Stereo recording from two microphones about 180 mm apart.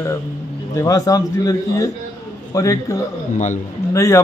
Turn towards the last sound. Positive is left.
turn(degrees=15)  # may be behind; listen again after turning